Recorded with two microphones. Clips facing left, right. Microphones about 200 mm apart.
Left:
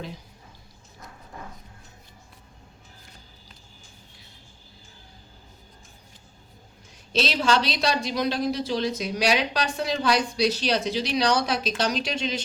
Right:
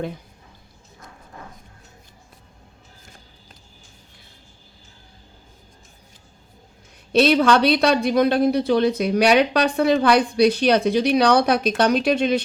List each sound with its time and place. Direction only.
7.1 s speech: 60° right (ahead or behind)